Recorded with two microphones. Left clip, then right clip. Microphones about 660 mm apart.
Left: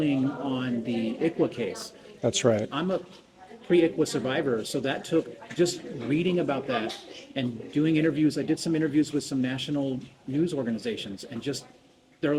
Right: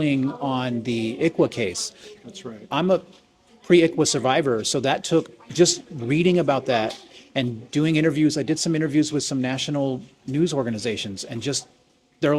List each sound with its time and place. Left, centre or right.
0.0 s speech: right
2.3 s speech: left
3.7 s speech: right